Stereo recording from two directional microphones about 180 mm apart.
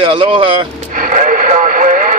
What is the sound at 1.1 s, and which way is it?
Radio, 45° right (ahead or behind).